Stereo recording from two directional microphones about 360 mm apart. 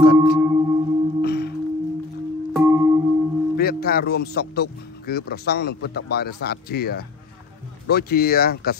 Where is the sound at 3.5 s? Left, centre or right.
Left.